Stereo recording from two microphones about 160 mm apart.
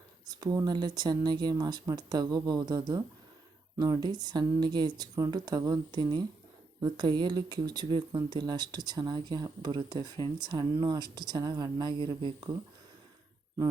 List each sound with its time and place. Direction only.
0.3 s speech: 25° right (ahead or behind)